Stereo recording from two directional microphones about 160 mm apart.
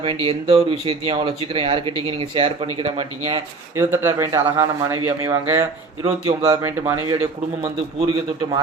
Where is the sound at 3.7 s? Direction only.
15° right (ahead or behind).